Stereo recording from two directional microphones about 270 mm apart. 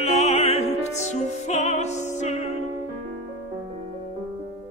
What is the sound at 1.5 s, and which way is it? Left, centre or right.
Music, left.